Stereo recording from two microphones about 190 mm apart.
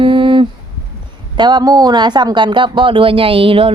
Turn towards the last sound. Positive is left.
turn(degrees=-30)  # may be behind; listen again after turning